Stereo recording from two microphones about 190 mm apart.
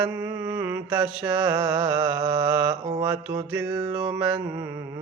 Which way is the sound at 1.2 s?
20° right (ahead or behind).